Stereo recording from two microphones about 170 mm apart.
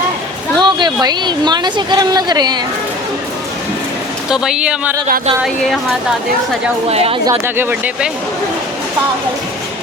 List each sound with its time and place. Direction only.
0.6 s speech: 25° right (ahead or behind)
4.3 s speech: 5° right (ahead or behind)
6.8 s speech: 35° right (ahead or behind)
7.3 s speech: 15° right (ahead or behind)